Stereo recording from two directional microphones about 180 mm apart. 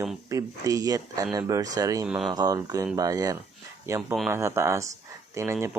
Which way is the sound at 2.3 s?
20° right (ahead or behind).